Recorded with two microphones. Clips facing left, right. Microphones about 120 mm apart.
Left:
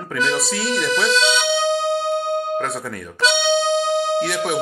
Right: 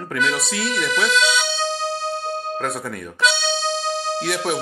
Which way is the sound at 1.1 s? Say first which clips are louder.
Left 2 dB; 25° left (ahead or behind).